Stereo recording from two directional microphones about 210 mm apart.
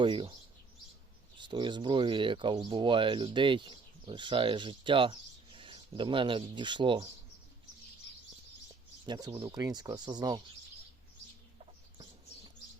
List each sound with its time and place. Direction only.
0.0 s speech: 20° right (ahead or behind)
1.4 s speech: 20° right (ahead or behind)
9.0 s speech: 20° right (ahead or behind)